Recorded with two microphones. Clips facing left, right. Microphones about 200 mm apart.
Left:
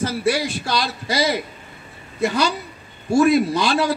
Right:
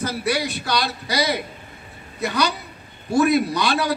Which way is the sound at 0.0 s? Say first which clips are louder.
Left 3 dB; 30° left (ahead or behind).